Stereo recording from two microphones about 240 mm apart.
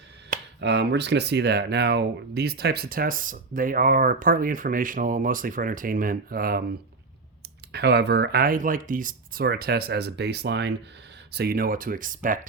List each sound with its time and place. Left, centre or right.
0.3 s speech: right
7.7 s speech: right